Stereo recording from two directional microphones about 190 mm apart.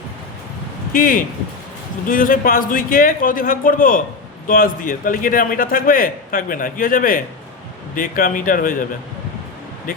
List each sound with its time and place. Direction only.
0.9 s a man's voice: 50° left (ahead or behind)